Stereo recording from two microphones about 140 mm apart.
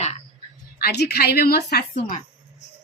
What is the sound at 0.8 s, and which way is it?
A woman's voice, 90° left.